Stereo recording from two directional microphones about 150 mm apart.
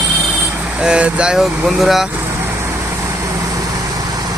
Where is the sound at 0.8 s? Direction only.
5° right (ahead or behind).